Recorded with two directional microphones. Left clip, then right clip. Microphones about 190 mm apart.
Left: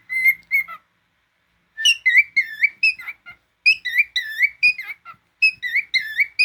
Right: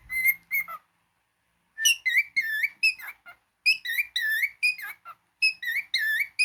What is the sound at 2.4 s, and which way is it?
Whistle, 25° right (ahead or behind).